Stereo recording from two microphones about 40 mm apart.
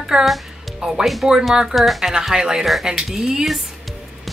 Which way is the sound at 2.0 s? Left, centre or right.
Centre.